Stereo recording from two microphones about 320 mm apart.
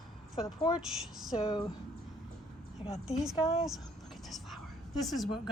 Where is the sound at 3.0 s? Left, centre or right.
Centre.